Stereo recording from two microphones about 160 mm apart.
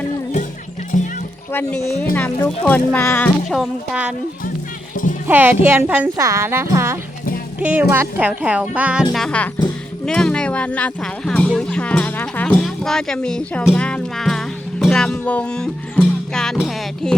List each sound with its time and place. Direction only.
0.9 s music: 50° left (ahead or behind)
2.1 s speech: 10° left (ahead or behind)
3.5 s speech: 5° right (ahead or behind)
4.9 s a sound: 55° left (ahead or behind)
5.3 s speech: 10° right (ahead or behind)
9.1 s speech: 5° left (ahead or behind)
13.7 s music: 5° left (ahead or behind)